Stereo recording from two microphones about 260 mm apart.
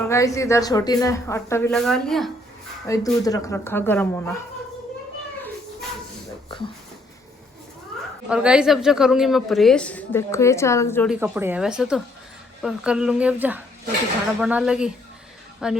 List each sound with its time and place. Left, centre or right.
0.1 s speech: centre
2.8 s speech: centre
8.3 s a woman's voice: centre
11.1 s a woman's voice: centre